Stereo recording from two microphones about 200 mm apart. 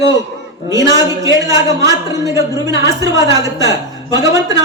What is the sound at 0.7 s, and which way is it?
A man's voice, 15° right (ahead or behind).